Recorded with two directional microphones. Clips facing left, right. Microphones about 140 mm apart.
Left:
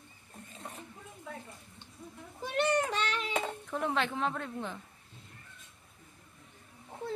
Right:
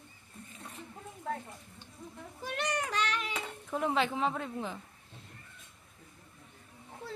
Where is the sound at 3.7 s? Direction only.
5° right (ahead or behind).